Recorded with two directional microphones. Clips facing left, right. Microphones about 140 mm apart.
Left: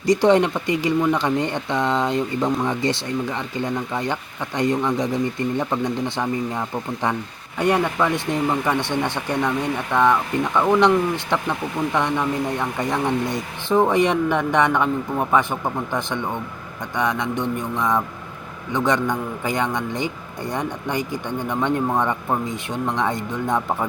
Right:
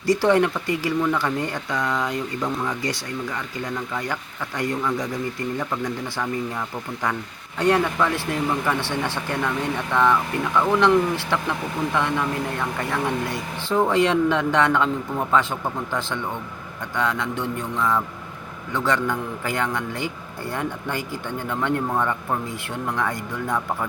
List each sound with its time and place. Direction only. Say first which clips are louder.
0.0 s speech: left 2 dB; 20° left (ahead or behind)